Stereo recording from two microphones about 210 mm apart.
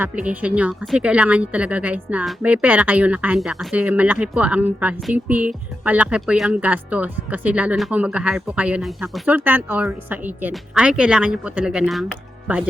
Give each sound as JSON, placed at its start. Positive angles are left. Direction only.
{"t": 0.0, "sound": "speech", "side_deg": -5}